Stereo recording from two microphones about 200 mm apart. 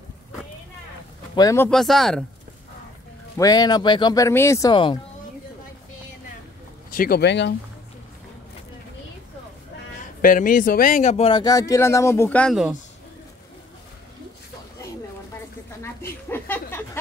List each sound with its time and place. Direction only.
1.3 s speech: 15° left (ahead or behind)
1.7 s speech: centre (ahead or behind)
3.3 s a man's voice: 20° left (ahead or behind)
7.0 s speech: 55° left (ahead or behind)
10.2 s a man's voice: 45° left (ahead or behind); by 12.7 s centre (ahead or behind)
15.8 s a sound: 10° left (ahead or behind)